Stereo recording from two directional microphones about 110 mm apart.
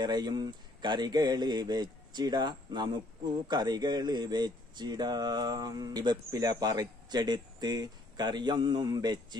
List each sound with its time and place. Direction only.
0.0 s speech: 40° right (ahead or behind)